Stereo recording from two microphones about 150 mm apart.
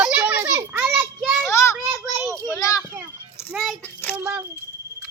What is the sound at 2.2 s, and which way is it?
Child singing, 20° right (ahead or behind).